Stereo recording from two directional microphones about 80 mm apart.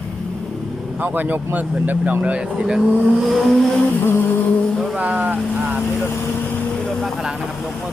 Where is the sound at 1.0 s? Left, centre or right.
Right.